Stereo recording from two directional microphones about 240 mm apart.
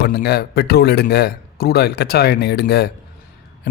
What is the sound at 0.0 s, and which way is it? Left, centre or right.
Speech, left.